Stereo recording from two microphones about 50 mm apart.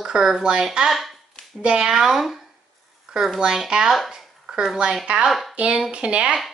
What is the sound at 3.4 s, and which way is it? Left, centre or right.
Speech, centre.